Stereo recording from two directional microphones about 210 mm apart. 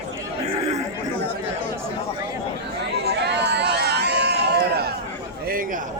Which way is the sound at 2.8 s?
55° right (ahead or behind).